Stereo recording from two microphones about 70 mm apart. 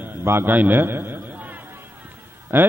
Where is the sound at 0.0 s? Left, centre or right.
Right.